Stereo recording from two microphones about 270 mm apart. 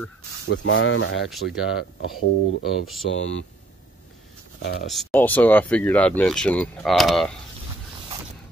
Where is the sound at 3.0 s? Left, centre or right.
Left.